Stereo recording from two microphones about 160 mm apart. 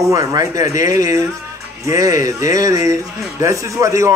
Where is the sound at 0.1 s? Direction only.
20° right (ahead or behind).